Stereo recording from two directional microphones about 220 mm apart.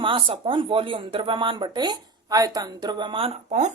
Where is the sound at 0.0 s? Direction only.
25° right (ahead or behind).